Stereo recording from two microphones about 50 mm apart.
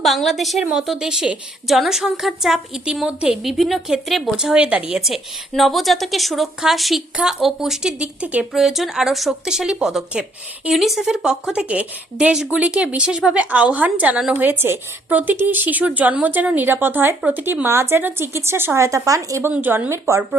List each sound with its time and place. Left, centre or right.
0.0 s a woman's voice: centre
0.7 s speech: centre
3.4 s a woman's voice: centre
4.5 s speech: right
5.0 s a woman's voice: centre
7.9 s speech: right
8.5 s a woman's voice: centre; by 14.2 s right
14.3 s a woman's voice: right
17.7 s speech: right
19.4 s speech: right
19.9 s speech: right